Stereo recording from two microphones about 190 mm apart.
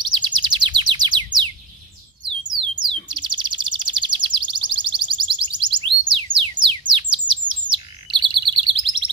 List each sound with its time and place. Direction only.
0.0 s bird: 25° right (ahead or behind)
3.1 s chirp: 25° right (ahead or behind)